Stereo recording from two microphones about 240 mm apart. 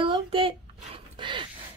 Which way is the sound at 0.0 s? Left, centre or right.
Right.